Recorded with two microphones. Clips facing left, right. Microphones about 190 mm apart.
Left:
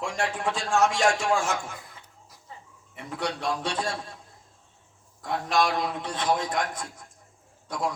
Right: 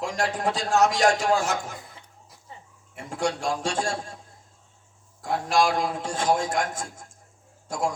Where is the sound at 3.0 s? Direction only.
45° right (ahead or behind).